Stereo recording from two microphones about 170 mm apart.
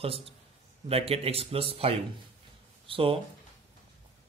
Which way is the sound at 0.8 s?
35° right (ahead or behind).